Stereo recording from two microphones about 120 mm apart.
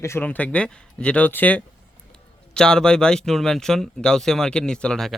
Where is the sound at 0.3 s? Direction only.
10° left (ahead or behind).